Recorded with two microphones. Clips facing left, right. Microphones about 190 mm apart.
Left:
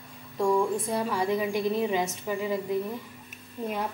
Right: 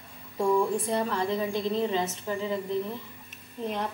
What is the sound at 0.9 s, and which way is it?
A woman's voice, 10° left (ahead or behind).